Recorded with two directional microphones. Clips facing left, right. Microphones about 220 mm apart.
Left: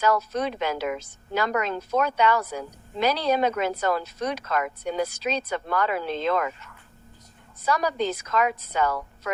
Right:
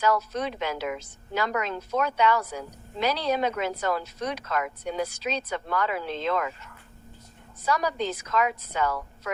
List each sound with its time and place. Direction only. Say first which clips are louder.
0.0 s speech: left 2 dB; 45° left (ahead or behind)
7.7 s speech: left 2 dB; 45° left (ahead or behind)